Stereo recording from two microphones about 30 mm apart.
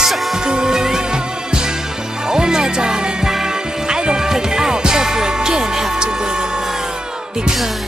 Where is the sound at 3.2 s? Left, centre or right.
Centre.